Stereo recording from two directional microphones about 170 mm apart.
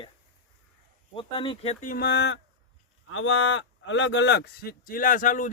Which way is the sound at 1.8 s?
60° left (ahead or behind).